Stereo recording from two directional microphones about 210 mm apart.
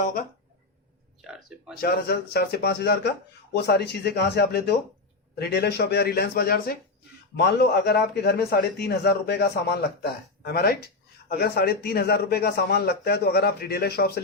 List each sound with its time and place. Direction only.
1.3 s speech: 5° right (ahead or behind)
1.8 s a man's voice: 45° left (ahead or behind)